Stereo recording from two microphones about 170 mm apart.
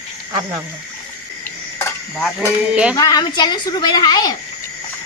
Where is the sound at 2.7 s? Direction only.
5° right (ahead or behind).